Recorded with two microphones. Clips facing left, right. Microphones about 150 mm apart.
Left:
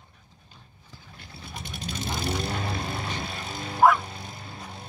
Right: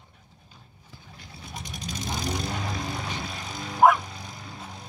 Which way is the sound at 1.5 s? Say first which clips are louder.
Left 1 dB; 15° right (ahead or behind).